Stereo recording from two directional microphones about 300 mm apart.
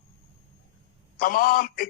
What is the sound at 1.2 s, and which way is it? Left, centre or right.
Speech, left.